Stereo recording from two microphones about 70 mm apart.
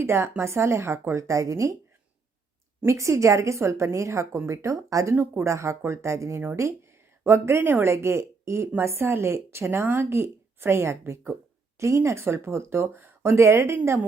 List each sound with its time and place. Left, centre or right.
0.0 s speech: right
2.8 s speech: right
5.1 s speech: right
5.4 s a woman's voice: right